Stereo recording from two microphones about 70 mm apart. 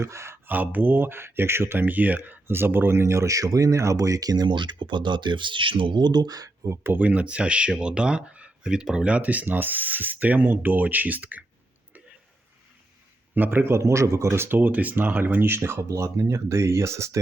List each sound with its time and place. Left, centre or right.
0.0 s speech: right
0.4 s speech: right
6.7 s speech: right
13.3 s speech: right
15.8 s speech: right